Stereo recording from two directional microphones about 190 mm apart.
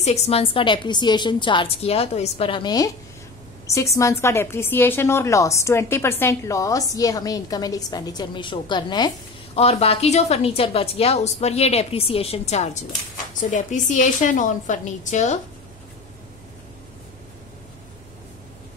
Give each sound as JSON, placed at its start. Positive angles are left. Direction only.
{"t": 0.0, "sound": "a woman's voice", "side_deg": 35}